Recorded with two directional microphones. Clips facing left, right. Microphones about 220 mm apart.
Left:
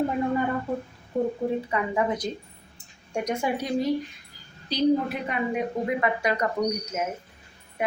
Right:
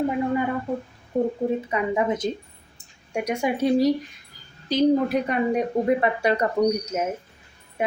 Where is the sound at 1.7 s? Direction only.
20° right (ahead or behind).